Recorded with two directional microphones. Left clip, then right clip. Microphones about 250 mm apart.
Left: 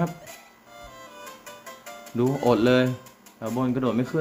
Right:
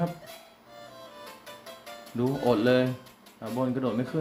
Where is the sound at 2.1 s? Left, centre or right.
Left.